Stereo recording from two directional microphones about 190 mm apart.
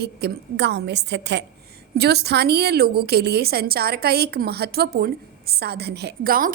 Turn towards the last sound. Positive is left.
turn(degrees=-50)  # may be behind; listen again after turning